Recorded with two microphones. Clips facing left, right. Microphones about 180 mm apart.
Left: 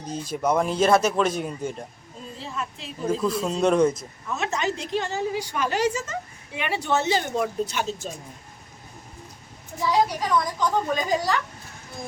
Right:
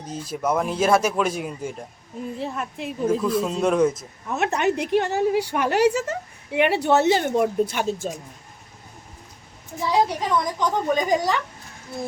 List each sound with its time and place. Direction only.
0.1 s a man's voice: 5° right (ahead or behind)
2.4 s a woman's voice: 55° right (ahead or behind)
3.1 s speech: 5° right (ahead or behind)
4.3 s a woman's voice: 60° right (ahead or behind)
10.2 s a woman's voice: 20° right (ahead or behind)